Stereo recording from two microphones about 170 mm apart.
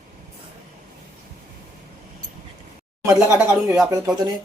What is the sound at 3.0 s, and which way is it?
Speech, 20° right (ahead or behind).